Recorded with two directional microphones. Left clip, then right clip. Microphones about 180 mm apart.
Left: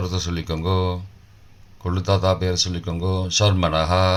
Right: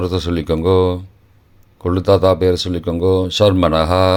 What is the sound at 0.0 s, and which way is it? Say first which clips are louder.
Speech: right 8 dB; 50° right (ahead or behind).